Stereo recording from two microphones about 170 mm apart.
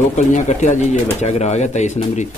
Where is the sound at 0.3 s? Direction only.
45° left (ahead or behind).